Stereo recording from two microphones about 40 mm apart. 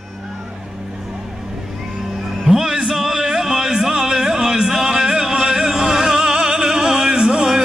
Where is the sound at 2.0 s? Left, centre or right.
Centre.